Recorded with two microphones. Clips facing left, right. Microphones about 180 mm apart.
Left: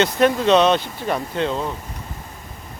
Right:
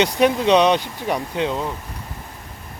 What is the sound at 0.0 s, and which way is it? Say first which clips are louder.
Speech: even; 15° right (ahead or behind).